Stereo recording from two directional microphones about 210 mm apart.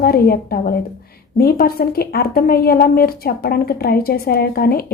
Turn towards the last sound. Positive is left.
turn(degrees=45)  # may be behind; listen again after turning